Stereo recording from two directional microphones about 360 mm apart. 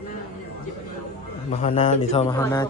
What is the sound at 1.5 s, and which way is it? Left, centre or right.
Speech, centre.